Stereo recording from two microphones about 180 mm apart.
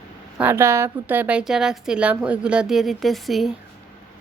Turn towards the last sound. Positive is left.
turn(degrees=0)  # may be behind; listen again after turning